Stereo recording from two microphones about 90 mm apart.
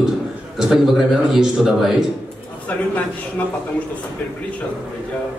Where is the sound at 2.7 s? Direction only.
15° left (ahead or behind).